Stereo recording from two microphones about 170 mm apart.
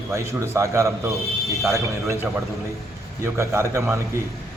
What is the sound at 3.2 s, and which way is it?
Speech, 15° right (ahead or behind).